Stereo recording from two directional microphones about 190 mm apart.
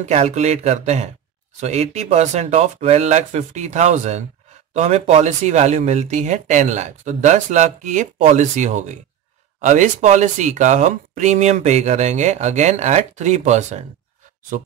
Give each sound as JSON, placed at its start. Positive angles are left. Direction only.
{"t": 0.0, "sound": "speech", "side_deg": -35}